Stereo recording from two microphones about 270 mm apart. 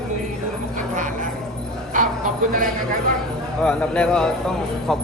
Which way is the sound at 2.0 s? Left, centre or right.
Right.